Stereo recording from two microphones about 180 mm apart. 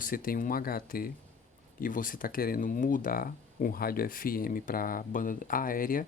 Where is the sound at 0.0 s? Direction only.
50° left (ahead or behind).